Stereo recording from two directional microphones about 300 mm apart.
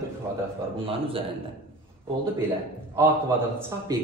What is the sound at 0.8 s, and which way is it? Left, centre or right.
Speech, centre.